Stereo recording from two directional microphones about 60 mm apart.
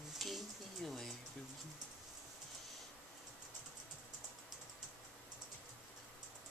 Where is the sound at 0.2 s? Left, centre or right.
Centre.